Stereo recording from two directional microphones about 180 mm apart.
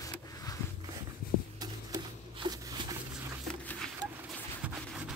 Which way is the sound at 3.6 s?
10° left (ahead or behind).